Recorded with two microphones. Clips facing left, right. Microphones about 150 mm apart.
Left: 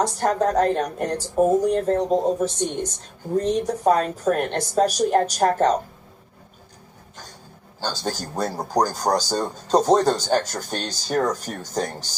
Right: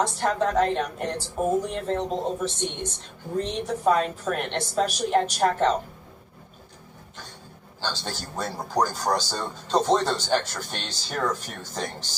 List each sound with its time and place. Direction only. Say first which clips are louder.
0.0 s a woman's voice: left 3 dB; 45° left (ahead or behind)
7.8 s speech: left 5 dB; 40° left (ahead or behind)